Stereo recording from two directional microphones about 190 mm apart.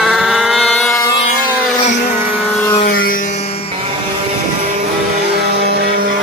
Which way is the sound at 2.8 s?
50° left (ahead or behind).